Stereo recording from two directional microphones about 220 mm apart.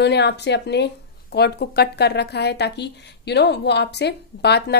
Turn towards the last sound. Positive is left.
turn(degrees=50)  # may be behind; listen again after turning